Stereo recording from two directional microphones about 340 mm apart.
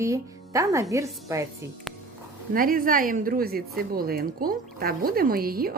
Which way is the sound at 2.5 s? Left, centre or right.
Right.